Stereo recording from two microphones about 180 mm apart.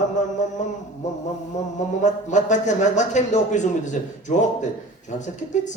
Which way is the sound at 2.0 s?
40° left (ahead or behind).